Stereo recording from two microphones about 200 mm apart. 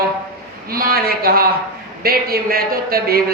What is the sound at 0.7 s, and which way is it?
A man's voice, 45° right (ahead or behind).